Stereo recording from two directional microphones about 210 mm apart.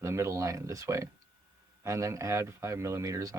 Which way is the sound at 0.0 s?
15° right (ahead or behind).